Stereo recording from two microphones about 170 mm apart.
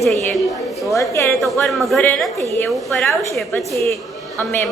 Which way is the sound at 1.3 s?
Centre (ahead or behind).